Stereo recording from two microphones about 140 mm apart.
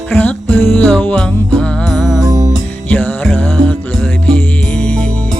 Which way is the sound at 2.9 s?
10° left (ahead or behind).